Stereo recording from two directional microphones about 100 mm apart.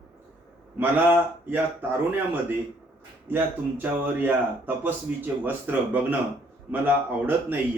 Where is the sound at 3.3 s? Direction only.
20° right (ahead or behind).